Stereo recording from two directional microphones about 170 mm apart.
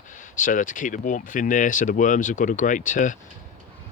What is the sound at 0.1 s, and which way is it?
Speech, 50° left (ahead or behind).